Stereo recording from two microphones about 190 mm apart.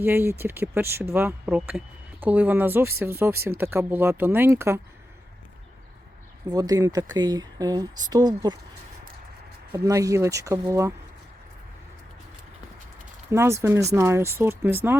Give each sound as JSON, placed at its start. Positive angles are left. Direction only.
{"t": 0.0, "sound": "speech", "side_deg": -10}
{"t": 6.5, "sound": "speech", "side_deg": -20}
{"t": 9.7, "sound": "speech", "side_deg": -15}
{"t": 13.3, "sound": "speech", "side_deg": -15}